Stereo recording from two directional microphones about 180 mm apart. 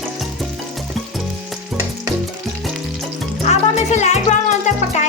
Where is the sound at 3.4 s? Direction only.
40° left (ahead or behind).